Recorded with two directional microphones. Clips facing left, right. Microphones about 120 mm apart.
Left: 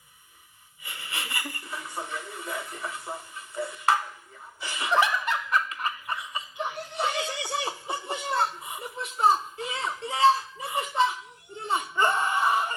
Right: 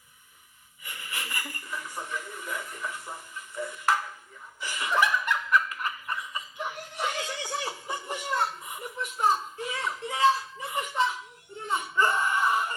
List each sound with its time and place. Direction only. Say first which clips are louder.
0.9 s wheeze: left 1 dB; 90° left
1.1 s a sound: left 2 dB; 30° left (ahead or behind)
3.1 s music: left 3 dB; 30° left (ahead or behind)
4.6 s snicker: left 2 dB; 30° left (ahead or behind)
7.4 s chuckle: left 2 dB; 30° left (ahead or behind)
11.7 s a sound: left 1 dB; 25° left (ahead or behind)